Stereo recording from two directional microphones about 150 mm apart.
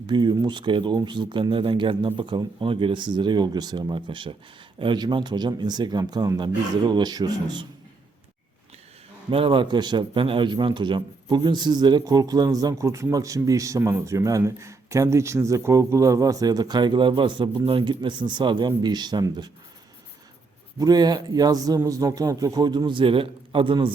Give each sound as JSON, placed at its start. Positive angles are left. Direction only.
{"t": 0.1, "sound": "a man's voice", "side_deg": -30}
{"t": 9.3, "sound": "a man's voice", "side_deg": -35}
{"t": 20.7, "sound": "a man's voice", "side_deg": -25}